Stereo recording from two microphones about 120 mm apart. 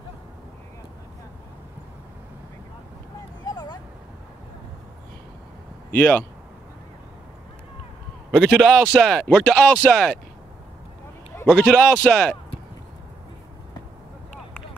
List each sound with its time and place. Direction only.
3.4 s a sound: 35° left (ahead or behind)
5.9 s speech: 10° left (ahead or behind)
8.3 s speech: centre (ahead or behind)
11.4 s speech: 10° left (ahead or behind)